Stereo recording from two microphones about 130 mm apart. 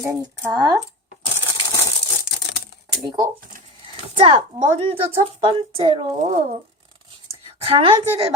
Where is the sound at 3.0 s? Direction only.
35° right (ahead or behind); by 6.4 s 55° right (ahead or behind).